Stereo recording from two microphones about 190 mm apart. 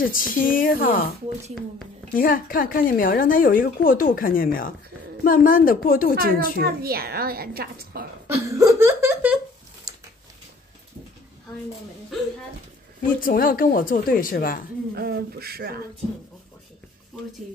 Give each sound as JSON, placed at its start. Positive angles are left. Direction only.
{"t": 0.0, "sound": "a woman's voice", "side_deg": 45}
{"t": 2.1, "sound": "a woman's voice", "side_deg": 50}
{"t": 6.5, "sound": "a woman's voice", "side_deg": -55}
{"t": 8.3, "sound": "a sound", "side_deg": -15}
{"t": 13.0, "sound": "a woman's voice", "side_deg": 45}
{"t": 15.0, "sound": "a woman's voice", "side_deg": -55}